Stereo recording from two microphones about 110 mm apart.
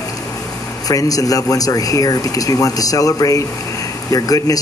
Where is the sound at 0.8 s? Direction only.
35° left (ahead or behind).